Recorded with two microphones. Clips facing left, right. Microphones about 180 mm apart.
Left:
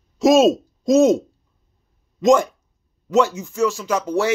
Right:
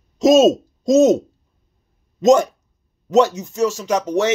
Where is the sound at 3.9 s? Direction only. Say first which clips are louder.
Right 2 dB; 20° right (ahead or behind).